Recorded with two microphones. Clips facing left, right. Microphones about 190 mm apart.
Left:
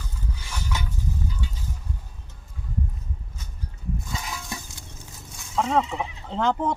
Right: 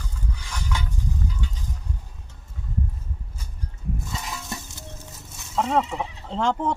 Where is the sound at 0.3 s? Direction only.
10° left (ahead or behind).